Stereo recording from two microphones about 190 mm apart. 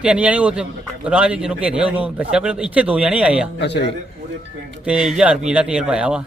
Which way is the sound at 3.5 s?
65° left (ahead or behind).